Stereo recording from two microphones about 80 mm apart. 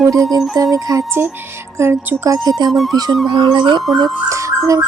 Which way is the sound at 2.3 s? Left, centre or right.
Right.